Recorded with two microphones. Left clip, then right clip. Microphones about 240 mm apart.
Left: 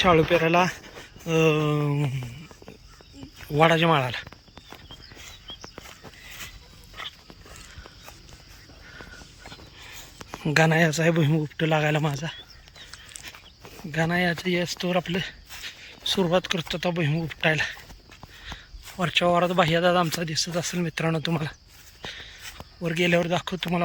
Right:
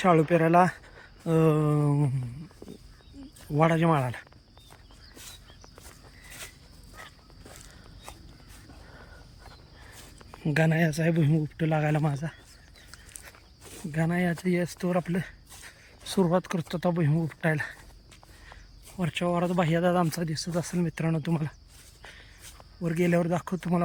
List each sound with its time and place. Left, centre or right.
0.0 s speech: centre
3.5 s speech: centre
10.4 s speech: centre
13.9 s speech: centre
22.1 s a sound: centre
22.8 s speech: centre